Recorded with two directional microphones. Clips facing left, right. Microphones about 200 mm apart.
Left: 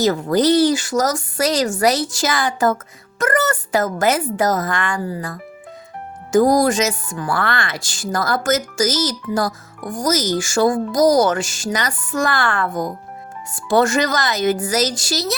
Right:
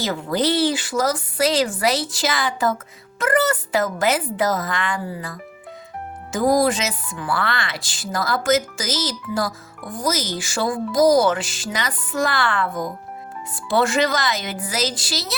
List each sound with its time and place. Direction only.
0.0 s speech: 45° left (ahead or behind)